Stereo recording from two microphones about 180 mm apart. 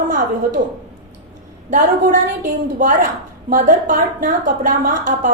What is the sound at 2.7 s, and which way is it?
A woman's voice, 45° right (ahead or behind).